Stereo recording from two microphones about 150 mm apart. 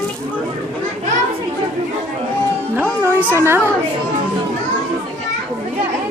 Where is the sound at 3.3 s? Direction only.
15° right (ahead or behind).